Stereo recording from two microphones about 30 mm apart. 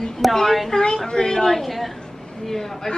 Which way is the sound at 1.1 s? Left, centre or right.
Left.